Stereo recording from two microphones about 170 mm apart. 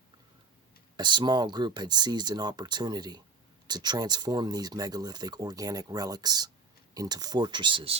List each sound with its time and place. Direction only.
0.9 s speech: 25° right (ahead or behind)